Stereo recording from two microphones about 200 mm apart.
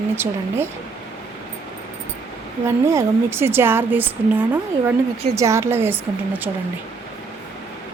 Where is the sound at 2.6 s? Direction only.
15° right (ahead or behind).